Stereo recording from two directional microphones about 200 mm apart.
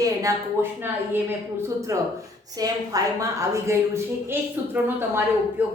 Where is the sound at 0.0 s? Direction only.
15° right (ahead or behind).